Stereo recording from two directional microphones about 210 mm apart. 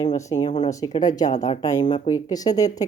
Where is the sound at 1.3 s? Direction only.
35° left (ahead or behind).